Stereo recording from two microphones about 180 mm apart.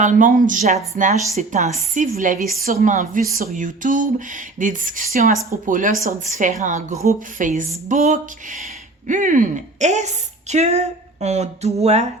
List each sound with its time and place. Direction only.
0.0 s a woman's voice: 45° right (ahead or behind)